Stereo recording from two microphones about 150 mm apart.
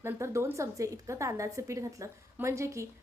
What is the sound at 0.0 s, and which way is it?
A woman's voice, 20° right (ahead or behind).